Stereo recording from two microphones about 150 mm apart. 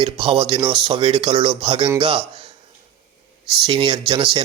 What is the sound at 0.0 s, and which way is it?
A man's voice, 35° right (ahead or behind).